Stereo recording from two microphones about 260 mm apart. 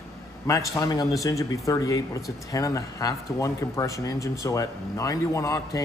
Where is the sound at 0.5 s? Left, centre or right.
Centre.